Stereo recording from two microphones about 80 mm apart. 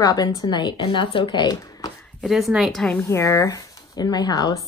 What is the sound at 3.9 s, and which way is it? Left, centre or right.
Speech, left.